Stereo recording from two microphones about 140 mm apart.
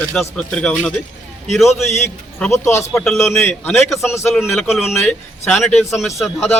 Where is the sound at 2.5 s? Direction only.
20° left (ahead or behind).